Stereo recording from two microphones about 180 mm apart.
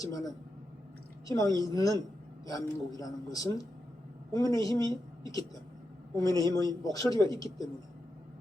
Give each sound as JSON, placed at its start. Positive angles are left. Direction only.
{"t": 0.0, "sound": "a man's voice", "side_deg": 20}